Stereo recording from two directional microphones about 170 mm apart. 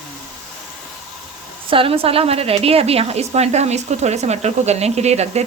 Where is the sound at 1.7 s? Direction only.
30° right (ahead or behind).